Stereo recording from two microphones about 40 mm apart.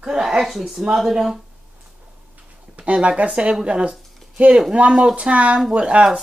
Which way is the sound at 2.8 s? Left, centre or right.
Right.